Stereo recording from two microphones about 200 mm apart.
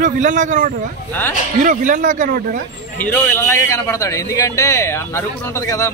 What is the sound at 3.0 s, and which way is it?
A man's voice, 10° left (ahead or behind).